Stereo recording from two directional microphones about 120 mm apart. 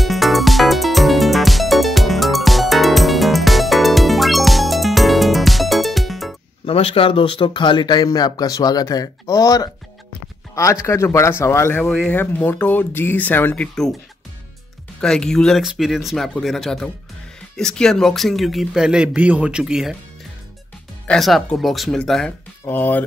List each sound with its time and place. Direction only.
0.0 s music: centre (ahead or behind)
6.6 s speech: 55° left (ahead or behind); by 11.8 s 20° left (ahead or behind)
11.8 s a man's voice: 5° left (ahead or behind)
12.2 s speech: 15° left (ahead or behind)
15.0 s a man's voice: 5° left (ahead or behind)
21.1 s a man's voice: centre (ahead or behind)
22.7 s speech: 15° left (ahead or behind)